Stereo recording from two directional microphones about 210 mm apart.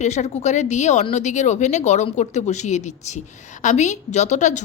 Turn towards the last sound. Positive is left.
turn(degrees=35)  # may be behind; listen again after turning